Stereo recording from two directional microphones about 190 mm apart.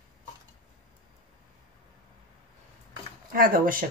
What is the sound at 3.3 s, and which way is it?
Speech, 50° right (ahead or behind).